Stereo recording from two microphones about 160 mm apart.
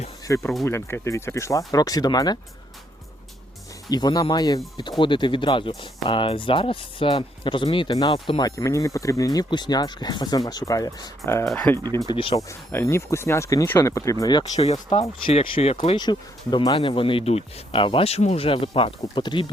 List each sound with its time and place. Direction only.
0.3 s speech: 20° left (ahead or behind)
3.8 s speech: 25° left (ahead or behind)
11.4 s speech: 5° left (ahead or behind)
11.9 s speech: 20° left (ahead or behind)
12.1 s speech: 35° left (ahead or behind)
12.4 s speech: 20° left (ahead or behind)
14.5 s speech: 40° left (ahead or behind)